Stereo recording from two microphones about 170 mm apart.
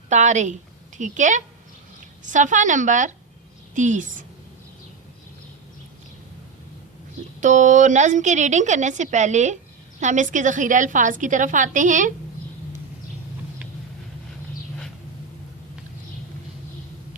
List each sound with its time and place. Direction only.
0.1 s a woman's voice: 45° right (ahead or behind)
7.4 s a woman's voice: 45° right (ahead or behind)